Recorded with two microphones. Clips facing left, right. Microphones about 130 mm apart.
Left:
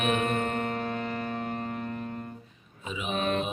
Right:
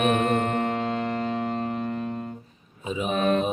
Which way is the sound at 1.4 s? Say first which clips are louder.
Right 5 dB; 90° right.